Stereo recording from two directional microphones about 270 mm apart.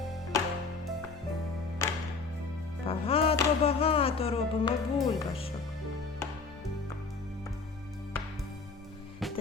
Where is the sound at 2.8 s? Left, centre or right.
Left.